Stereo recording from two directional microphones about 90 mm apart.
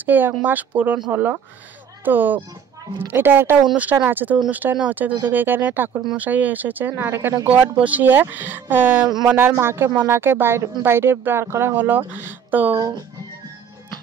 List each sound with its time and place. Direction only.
0.0 s speech: 20° right (ahead or behind)
7.4 s speech: 15° right (ahead or behind)